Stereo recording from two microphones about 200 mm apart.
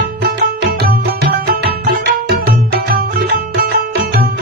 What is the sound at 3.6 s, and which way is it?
Music, 50° right (ahead or behind).